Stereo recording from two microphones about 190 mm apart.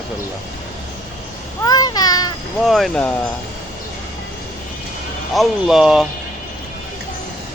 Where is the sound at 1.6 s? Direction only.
20° left (ahead or behind).